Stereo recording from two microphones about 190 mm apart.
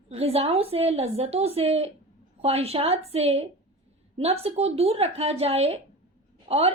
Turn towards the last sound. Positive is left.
turn(degrees=-35)  # may be behind; listen again after turning